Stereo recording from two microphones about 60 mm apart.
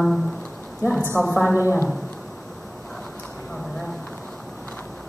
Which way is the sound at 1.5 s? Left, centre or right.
Left.